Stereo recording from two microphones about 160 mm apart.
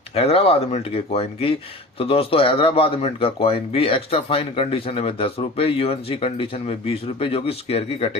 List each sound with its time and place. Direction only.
0.1 s speech: 40° left (ahead or behind)